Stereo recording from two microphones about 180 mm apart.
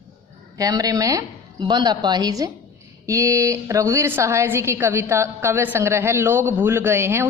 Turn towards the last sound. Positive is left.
turn(degrees=-15)  # may be behind; listen again after turning